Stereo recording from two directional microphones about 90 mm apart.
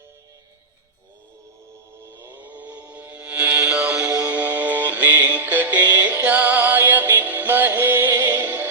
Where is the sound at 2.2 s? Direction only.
20° right (ahead or behind).